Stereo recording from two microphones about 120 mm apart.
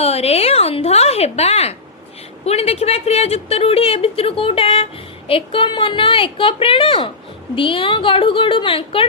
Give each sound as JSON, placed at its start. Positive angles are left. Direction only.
{"t": 0.0, "sound": "a woman's voice", "side_deg": 55}